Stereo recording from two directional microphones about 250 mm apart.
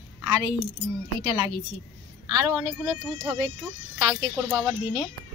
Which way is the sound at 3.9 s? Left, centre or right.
Centre.